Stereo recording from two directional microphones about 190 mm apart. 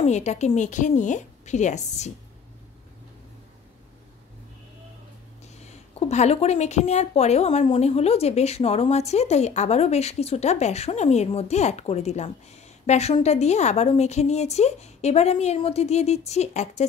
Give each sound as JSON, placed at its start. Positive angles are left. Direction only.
{"t": 0.0, "sound": "speech", "side_deg": 35}
{"t": 5.6, "sound": "speech", "side_deg": 35}